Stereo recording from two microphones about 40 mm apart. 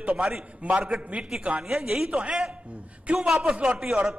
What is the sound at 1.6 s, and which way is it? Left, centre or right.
Speech, centre.